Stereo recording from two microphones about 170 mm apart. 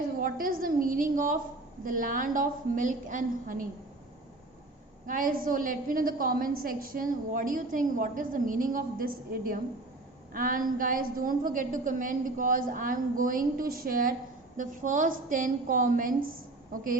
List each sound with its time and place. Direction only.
0.2 s a woman's voice: 55° right (ahead or behind)
5.0 s a woman's voice: 50° right (ahead or behind)